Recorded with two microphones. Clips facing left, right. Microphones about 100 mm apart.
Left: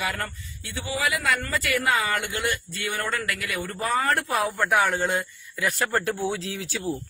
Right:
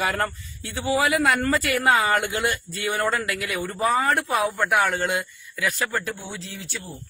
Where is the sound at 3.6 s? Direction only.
Centre (ahead or behind).